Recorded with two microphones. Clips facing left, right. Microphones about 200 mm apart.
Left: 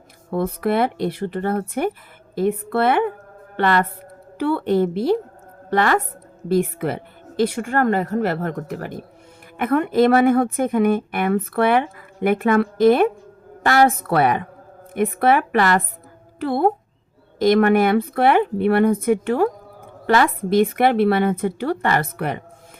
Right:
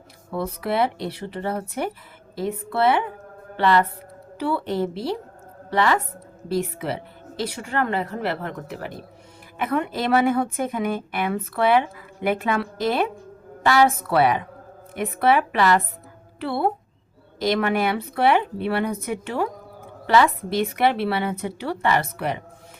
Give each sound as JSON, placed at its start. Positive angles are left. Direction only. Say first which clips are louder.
{"t": 0.3, "sound": "a woman's voice", "louder": "left 5 dB", "side_deg": 50}
{"t": 4.4, "sound": "a woman's voice", "louder": "left 5 dB", "side_deg": 55}